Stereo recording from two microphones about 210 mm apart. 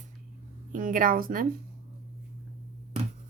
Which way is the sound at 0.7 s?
40° right (ahead or behind).